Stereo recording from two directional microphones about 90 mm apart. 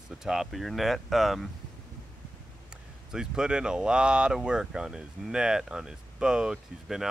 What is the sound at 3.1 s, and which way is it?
Speech, 10° right (ahead or behind).